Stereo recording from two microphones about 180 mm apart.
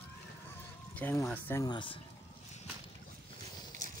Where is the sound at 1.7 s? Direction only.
25° left (ahead or behind).